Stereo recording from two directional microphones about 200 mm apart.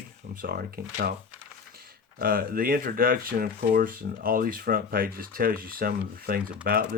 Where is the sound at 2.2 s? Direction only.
45° right (ahead or behind).